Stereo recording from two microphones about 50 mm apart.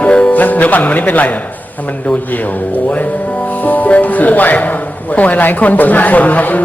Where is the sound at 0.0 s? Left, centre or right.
Left.